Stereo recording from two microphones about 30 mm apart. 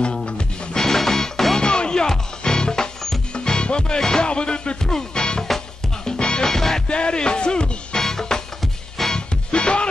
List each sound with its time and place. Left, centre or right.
0.0 s music: left
0.7 s music: centre
1.6 s music: left
2.0 s music: centre
3.6 s music: left
4.8 s music: centre
6.4 s music: centre
6.9 s music: left
8.0 s music: centre
9.0 s music: centre
9.5 s music: left